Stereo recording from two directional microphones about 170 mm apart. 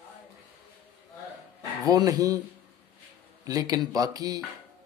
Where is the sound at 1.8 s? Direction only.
20° right (ahead or behind).